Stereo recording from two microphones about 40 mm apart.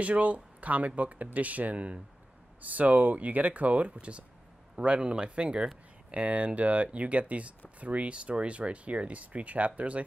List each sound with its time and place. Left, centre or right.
0.0 s speech: right